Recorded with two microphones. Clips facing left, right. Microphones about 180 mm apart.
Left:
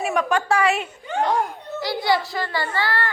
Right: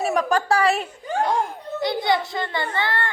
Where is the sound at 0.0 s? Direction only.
35° right (ahead or behind).